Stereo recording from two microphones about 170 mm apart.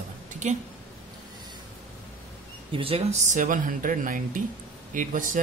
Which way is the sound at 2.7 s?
30° right (ahead or behind).